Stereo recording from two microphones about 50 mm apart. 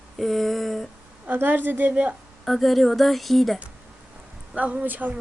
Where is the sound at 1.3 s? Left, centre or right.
Right.